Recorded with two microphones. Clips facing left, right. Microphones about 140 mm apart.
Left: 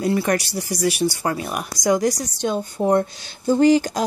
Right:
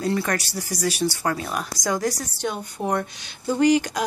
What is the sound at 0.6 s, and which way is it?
Speech, 10° left (ahead or behind).